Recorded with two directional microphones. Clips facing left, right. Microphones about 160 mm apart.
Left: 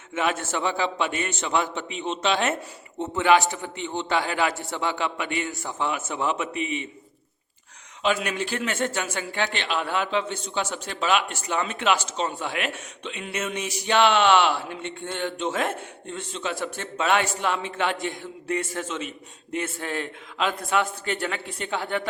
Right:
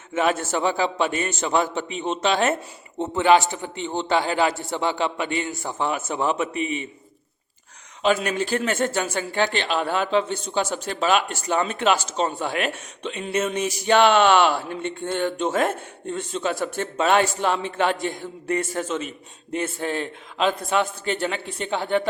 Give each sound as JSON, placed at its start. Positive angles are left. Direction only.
{"t": 0.1, "sound": "a man's voice", "side_deg": -40}
{"t": 3.0, "sound": "a man's voice", "side_deg": -30}
{"t": 8.0, "sound": "a man's voice", "side_deg": -40}
{"t": 19.5, "sound": "a man's voice", "side_deg": -30}